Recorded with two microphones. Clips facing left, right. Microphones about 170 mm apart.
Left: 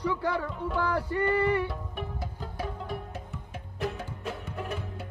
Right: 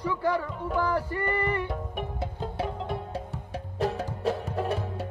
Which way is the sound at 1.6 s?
20° right (ahead or behind).